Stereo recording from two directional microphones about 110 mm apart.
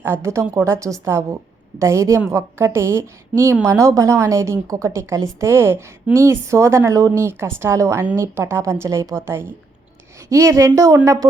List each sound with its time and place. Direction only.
0.0 s a woman's voice: 25° right (ahead or behind)